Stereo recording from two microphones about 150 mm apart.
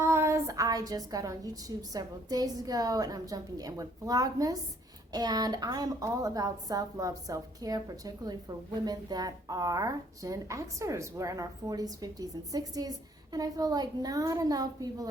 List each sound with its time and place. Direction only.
0.0 s a woman's voice: 15° right (ahead or behind)